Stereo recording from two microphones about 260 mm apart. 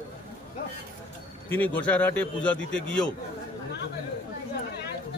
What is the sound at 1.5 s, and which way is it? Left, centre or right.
A man's voice, centre.